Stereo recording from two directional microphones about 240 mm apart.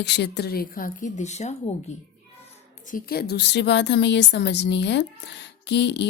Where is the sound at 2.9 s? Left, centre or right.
Left.